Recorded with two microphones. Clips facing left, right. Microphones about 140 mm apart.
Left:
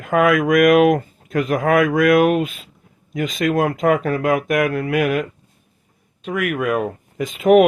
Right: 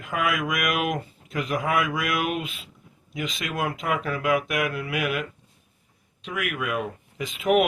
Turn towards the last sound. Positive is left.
turn(degrees=45)  # may be behind; listen again after turning